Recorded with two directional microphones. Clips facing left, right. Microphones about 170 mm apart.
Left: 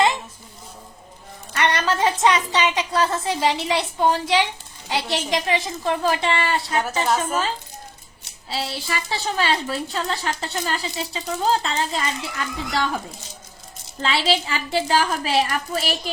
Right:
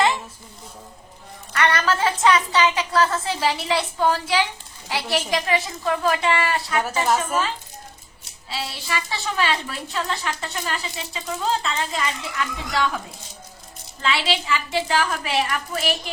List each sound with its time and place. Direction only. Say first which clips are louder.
1.5 s a woman's voice: even; 20° left (ahead or behind)
8.4 s a woman's voice: left 2 dB; 35° left (ahead or behind)
14.0 s a woman's voice: left 2 dB; 35° left (ahead or behind)